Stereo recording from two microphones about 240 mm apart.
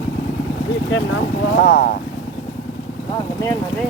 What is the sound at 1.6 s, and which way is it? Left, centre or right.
Speech, left.